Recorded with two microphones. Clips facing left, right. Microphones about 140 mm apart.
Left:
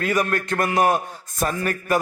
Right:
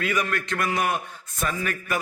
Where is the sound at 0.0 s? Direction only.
45° left (ahead or behind).